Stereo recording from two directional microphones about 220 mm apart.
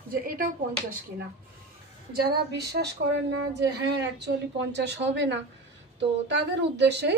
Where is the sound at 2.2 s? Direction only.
45° right (ahead or behind).